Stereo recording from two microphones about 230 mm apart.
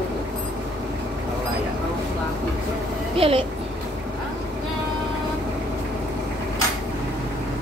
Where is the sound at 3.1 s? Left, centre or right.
Right.